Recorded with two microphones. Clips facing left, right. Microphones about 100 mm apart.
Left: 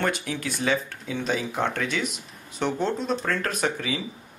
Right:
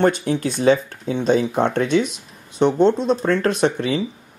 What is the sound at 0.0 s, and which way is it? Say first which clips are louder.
Speech: right 9 dB; 30° right (ahead or behind).